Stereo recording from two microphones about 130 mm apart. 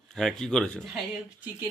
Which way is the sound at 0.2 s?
5° left (ahead or behind).